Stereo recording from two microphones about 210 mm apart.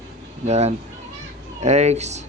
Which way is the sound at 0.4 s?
30° right (ahead or behind).